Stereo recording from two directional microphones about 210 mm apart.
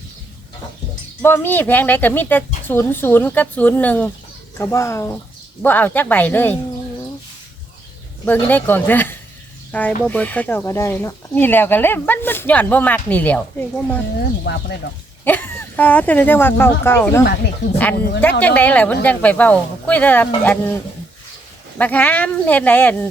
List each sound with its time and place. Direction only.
1.2 s speech: 10° left (ahead or behind)
8.2 s speech: 10° left (ahead or behind)
14.5 s speech: 55° left (ahead or behind)
15.2 s speech: 10° left (ahead or behind)